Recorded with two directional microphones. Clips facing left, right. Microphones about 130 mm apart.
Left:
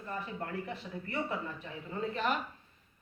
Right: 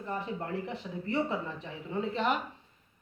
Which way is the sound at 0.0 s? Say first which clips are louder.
Right 4 dB; 20° right (ahead or behind).